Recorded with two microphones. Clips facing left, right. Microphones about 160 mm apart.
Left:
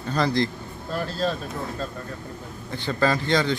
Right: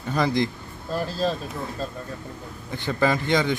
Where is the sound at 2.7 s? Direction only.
15° right (ahead or behind).